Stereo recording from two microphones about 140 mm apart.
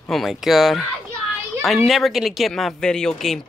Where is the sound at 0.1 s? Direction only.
Centre (ahead or behind).